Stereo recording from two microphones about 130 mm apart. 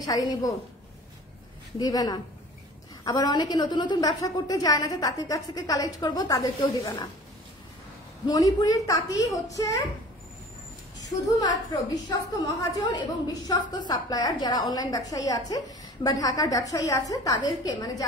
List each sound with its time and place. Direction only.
0.0 s a woman's voice: 30° left (ahead or behind)
1.8 s a woman's voice: 30° left (ahead or behind)
8.3 s a woman's voice: 25° left (ahead or behind)
11.1 s a woman's voice: 30° left (ahead or behind)